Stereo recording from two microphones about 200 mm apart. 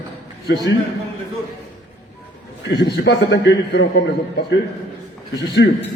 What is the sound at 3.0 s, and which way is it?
A man's voice, 60° left (ahead or behind).